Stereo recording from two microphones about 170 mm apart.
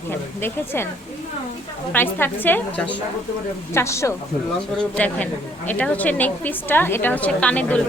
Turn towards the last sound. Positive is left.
turn(degrees=10)  # may be behind; listen again after turning